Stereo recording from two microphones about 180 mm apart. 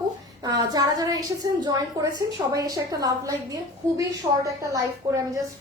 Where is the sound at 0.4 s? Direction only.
20° right (ahead or behind).